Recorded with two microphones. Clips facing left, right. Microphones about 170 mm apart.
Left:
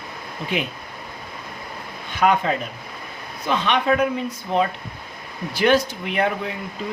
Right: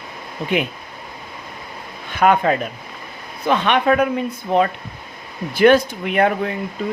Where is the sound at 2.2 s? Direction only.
55° right (ahead or behind).